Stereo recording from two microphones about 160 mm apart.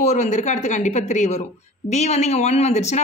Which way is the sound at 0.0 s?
45° left (ahead or behind).